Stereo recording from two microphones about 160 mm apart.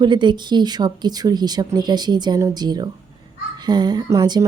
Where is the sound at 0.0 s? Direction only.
30° right (ahead or behind).